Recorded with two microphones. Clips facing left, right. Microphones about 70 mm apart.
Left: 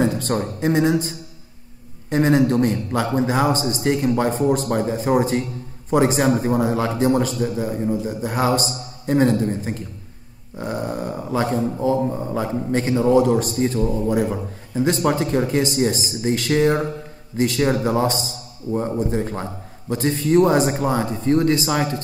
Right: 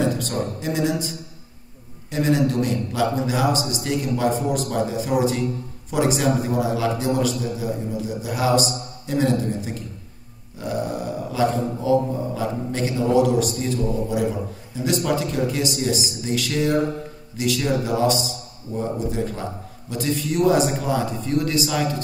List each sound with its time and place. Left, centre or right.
0.6 s a man's voice: left
10.6 s a sound: left
11.5 s a man's voice: left